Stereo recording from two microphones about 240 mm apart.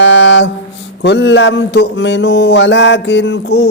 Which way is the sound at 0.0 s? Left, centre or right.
Left.